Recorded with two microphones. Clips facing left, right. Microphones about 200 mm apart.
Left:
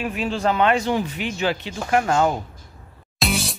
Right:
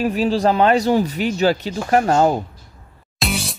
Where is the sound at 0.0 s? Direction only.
35° right (ahead or behind).